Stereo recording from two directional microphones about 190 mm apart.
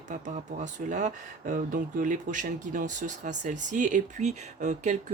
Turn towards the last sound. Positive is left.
turn(degrees=-40)  # may be behind; listen again after turning